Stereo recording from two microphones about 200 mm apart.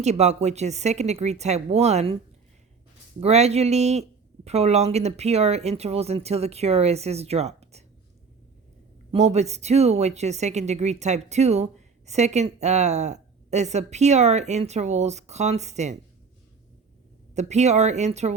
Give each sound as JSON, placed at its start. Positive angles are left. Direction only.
{"t": 0.0, "sound": "speech", "side_deg": -35}
{"t": 3.2, "sound": "speech", "side_deg": -35}
{"t": 9.1, "sound": "speech", "side_deg": -35}
{"t": 17.3, "sound": "speech", "side_deg": -35}